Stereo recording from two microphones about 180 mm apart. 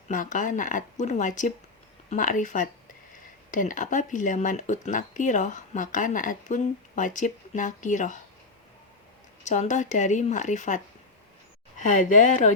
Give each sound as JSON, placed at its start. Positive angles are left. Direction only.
{"t": 0.1, "sound": "speech", "side_deg": 45}
{"t": 9.4, "sound": "speech", "side_deg": 40}
{"t": 11.8, "sound": "speech", "side_deg": 45}